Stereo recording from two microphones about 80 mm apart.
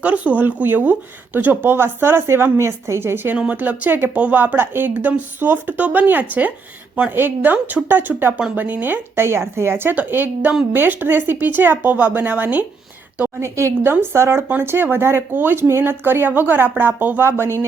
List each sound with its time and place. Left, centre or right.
0.0 s speech: centre
3.3 s speech: centre
13.4 s speech: right